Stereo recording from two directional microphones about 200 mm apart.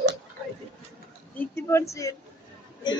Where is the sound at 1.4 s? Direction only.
15° left (ahead or behind).